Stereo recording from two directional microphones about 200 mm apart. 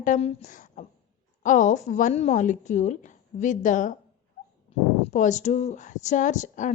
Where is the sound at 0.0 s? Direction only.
35° left (ahead or behind).